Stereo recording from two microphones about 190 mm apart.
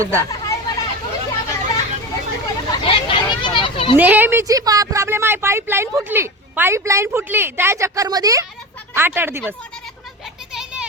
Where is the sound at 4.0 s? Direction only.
10° right (ahead or behind).